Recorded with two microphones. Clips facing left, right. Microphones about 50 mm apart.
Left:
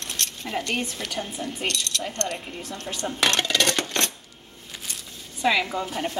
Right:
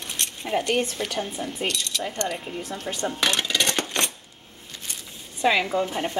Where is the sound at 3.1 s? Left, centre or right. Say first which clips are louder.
Left 2 dB; centre.